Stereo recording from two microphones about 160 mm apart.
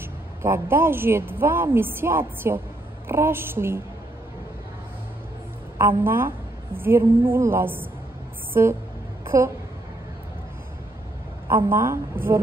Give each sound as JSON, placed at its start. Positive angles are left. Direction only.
{"t": 0.4, "sound": "speech", "side_deg": -15}
{"t": 5.8, "sound": "speech", "side_deg": -15}
{"t": 9.2, "sound": "a sound", "side_deg": -15}
{"t": 11.4, "sound": "speech", "side_deg": -15}